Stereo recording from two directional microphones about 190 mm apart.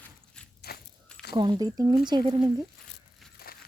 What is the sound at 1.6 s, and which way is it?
Speech, 20° right (ahead or behind).